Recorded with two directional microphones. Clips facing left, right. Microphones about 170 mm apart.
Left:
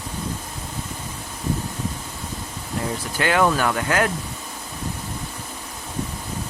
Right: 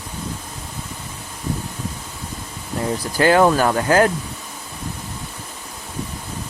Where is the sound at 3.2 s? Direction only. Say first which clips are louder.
Right 5 dB; 35° right (ahead or behind).